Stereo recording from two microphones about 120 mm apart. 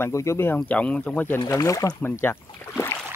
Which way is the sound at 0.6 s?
10° left (ahead or behind).